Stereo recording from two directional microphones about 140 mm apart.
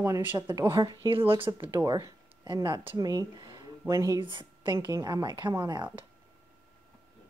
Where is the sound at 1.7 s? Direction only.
25° right (ahead or behind).